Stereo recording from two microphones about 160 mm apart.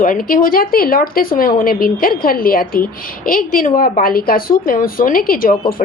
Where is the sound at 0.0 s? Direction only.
60° left (ahead or behind).